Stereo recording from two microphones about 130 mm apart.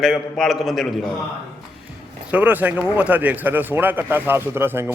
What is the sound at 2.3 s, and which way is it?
A man's voice, 10° right (ahead or behind).